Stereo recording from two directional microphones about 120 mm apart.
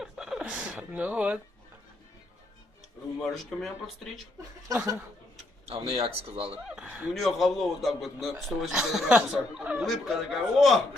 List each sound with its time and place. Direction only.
0.0 s a sound: 5° right (ahead or behind)
3.3 s speech: centre (ahead or behind)
4.7 s speech: 25° right (ahead or behind)
5.6 s a man's voice: 55° right (ahead or behind)
6.7 s speech: 5° right (ahead or behind)